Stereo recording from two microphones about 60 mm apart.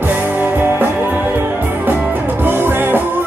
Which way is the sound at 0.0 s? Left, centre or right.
Right.